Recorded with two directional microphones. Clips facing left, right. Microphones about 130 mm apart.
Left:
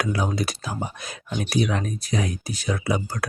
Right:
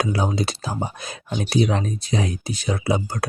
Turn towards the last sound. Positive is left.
turn(degrees=-25)  # may be behind; listen again after turning